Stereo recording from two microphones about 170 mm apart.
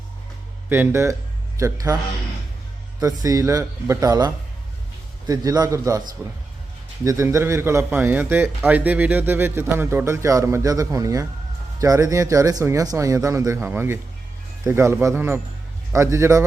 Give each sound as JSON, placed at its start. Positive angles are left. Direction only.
{"t": 0.7, "sound": "a man's voice", "side_deg": -15}
{"t": 3.0, "sound": "a man's voice", "side_deg": -20}